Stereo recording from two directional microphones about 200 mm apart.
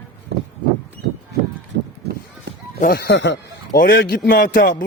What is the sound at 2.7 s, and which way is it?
Speech, 50° left (ahead or behind).